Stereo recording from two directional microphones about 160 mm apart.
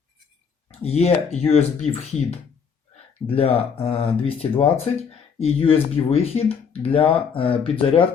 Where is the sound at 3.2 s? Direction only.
35° left (ahead or behind).